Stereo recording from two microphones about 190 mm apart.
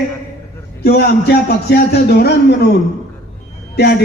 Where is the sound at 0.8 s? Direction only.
55° left (ahead or behind).